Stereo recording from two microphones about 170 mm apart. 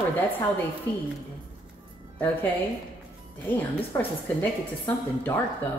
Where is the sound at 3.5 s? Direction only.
10° left (ahead or behind).